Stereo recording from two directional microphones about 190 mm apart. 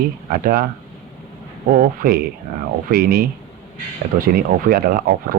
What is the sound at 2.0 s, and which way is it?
Speech, 50° right (ahead or behind).